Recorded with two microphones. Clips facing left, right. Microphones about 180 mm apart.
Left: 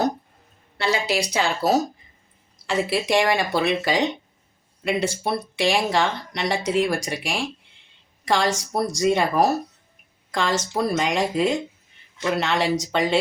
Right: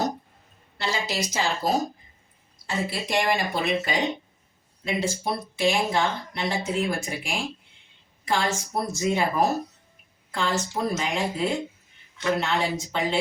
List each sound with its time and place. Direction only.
0.8 s speech: 65° left (ahead or behind)